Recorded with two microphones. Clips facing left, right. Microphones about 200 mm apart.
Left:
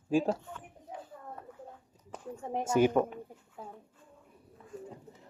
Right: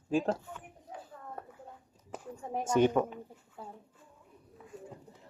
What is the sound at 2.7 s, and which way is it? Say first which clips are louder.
Speech: even; 10° left (ahead or behind).